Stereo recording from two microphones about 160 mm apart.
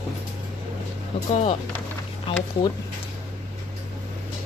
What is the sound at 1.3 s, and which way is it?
Speech, 40° left (ahead or behind).